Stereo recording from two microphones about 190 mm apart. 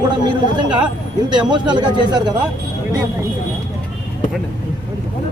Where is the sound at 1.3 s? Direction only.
25° right (ahead or behind).